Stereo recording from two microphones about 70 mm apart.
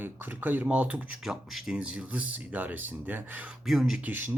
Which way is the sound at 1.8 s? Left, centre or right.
Centre.